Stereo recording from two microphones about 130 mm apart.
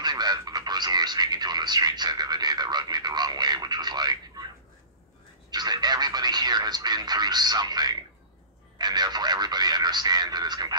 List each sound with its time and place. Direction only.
0.0 s speech: 35° right (ahead or behind)
5.5 s speech: 30° right (ahead or behind)